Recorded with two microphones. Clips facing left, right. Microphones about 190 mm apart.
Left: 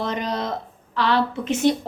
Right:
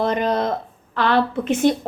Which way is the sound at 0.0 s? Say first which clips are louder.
Right 6 dB; 55° right (ahead or behind).